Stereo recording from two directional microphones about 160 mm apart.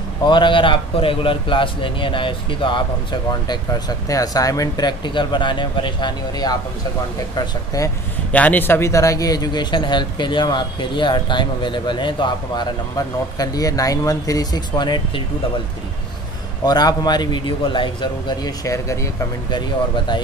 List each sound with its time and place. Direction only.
0.2 s a man's voice: 30° left (ahead or behind)
8.3 s a man's voice: 10° left (ahead or behind); by 15.2 s 25° left (ahead or behind)
16.6 s a man's voice: 25° left (ahead or behind)